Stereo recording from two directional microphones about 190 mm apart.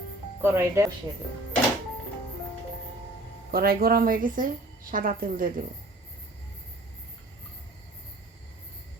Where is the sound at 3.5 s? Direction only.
50° right (ahead or behind).